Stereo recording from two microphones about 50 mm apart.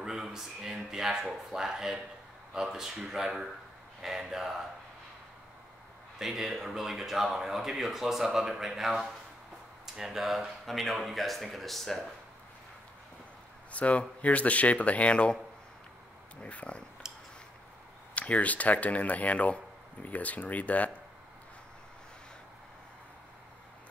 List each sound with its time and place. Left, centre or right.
0.0 s speech: centre
6.1 s speech: centre
13.7 s speech: left
16.3 s speech: left
17.0 s a sound: centre
18.1 s speech: left